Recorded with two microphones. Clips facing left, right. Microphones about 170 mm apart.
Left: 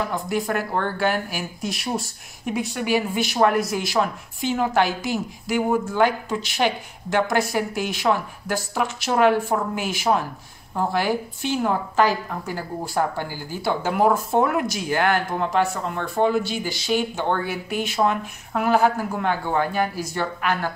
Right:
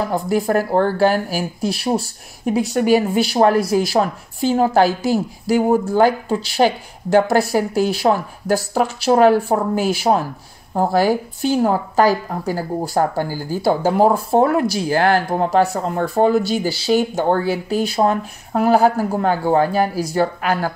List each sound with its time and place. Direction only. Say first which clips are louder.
0.1 s speech: right 7 dB; 35° right (ahead or behind)